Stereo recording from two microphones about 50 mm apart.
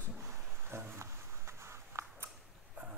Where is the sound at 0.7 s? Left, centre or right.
Right.